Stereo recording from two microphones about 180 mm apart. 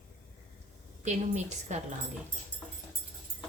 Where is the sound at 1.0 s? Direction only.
40° right (ahead or behind).